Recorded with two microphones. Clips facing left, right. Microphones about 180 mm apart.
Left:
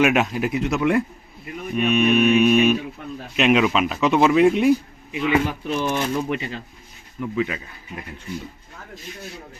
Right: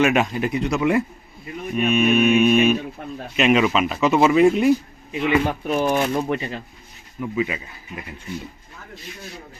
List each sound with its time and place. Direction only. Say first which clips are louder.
0.0 s speech: even; 5° left (ahead or behind)
5.5 s speech: right 3 dB; 45° right (ahead or behind)
7.2 s speech: even; 5° right (ahead or behind)